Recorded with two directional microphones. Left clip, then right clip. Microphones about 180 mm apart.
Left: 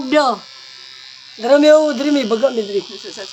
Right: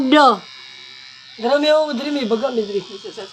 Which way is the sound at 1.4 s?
45° left (ahead or behind).